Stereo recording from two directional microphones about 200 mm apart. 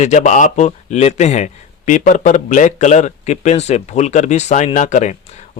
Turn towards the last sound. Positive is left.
turn(degrees=35)  # may be behind; listen again after turning